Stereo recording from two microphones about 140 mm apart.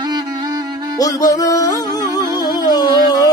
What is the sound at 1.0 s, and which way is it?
Music, 25° left (ahead or behind).